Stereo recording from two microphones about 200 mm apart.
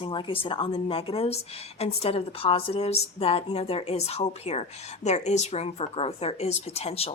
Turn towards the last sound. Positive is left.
turn(degrees=30)  # may be behind; listen again after turning